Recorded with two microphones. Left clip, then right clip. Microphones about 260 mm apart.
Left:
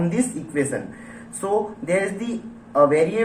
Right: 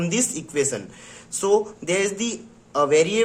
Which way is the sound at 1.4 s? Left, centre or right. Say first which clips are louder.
Right 4 dB; right.